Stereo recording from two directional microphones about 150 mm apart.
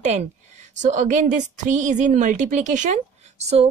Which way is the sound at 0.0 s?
50° right (ahead or behind).